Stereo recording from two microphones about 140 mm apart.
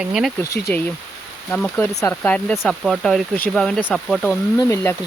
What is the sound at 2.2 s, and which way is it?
Speech, 10° left (ahead or behind).